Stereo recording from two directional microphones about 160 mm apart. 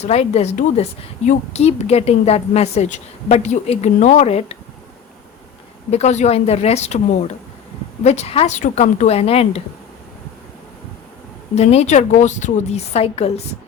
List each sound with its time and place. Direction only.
0.0 s a woman's voice: 40° left (ahead or behind)
5.9 s a woman's voice: 45° left (ahead or behind)
8.0 s a woman's voice: 45° left (ahead or behind)
11.5 s a woman's voice: 40° left (ahead or behind)